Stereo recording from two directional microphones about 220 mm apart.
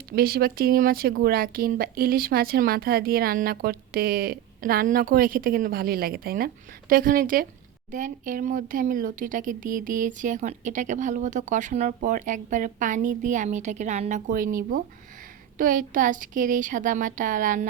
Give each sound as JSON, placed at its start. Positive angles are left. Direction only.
{"t": 0.2, "sound": "speech", "side_deg": -45}